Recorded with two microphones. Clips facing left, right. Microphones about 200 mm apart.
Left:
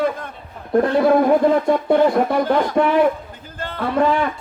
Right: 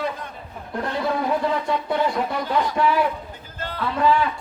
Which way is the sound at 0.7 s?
55° left (ahead or behind).